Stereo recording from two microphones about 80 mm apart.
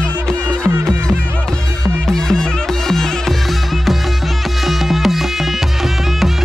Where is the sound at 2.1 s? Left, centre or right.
Centre.